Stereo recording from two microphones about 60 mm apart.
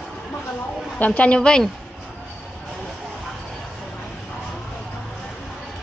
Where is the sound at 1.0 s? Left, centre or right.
Left.